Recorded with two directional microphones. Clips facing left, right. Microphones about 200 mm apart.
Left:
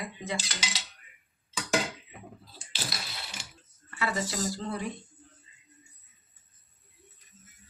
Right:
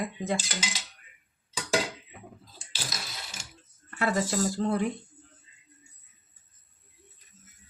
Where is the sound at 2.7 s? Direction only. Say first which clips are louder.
Left 1 dB; 45° right (ahead or behind).